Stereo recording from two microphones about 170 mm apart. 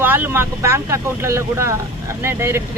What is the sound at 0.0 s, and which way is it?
Speech, 10° right (ahead or behind).